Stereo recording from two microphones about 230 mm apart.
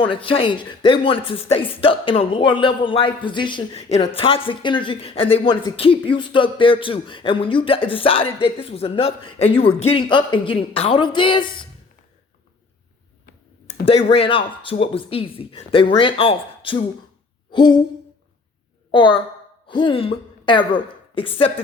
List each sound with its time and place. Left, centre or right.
0.0 s speech: left
13.7 s speech: left
17.5 s a sound: centre
18.9 s a woman's voice: left